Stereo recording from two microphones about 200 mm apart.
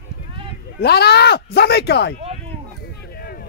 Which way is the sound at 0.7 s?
55° left (ahead or behind).